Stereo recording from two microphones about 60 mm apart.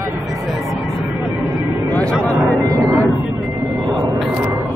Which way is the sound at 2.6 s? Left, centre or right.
Right.